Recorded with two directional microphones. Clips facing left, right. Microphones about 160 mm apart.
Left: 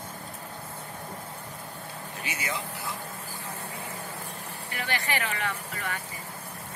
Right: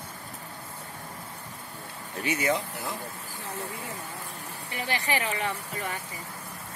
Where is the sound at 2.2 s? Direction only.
40° right (ahead or behind).